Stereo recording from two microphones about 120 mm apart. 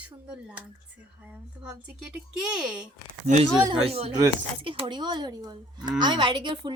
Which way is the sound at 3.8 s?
60° right (ahead or behind).